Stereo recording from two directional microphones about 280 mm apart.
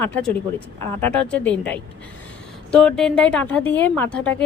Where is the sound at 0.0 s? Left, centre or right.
Centre.